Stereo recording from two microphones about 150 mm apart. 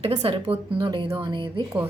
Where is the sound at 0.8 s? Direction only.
25° right (ahead or behind).